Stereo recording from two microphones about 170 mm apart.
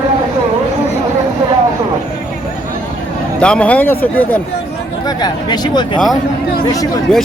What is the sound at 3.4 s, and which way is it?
Speech, 5° left (ahead or behind).